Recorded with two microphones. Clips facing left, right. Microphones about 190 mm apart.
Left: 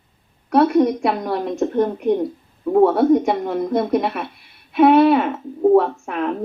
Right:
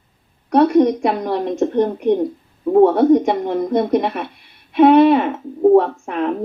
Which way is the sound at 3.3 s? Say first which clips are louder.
Right 2 dB; 20° right (ahead or behind).